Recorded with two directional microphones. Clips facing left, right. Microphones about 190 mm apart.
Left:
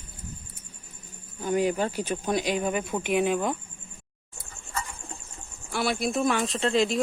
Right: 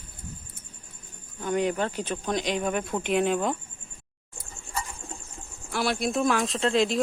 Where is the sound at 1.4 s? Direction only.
5° left (ahead or behind).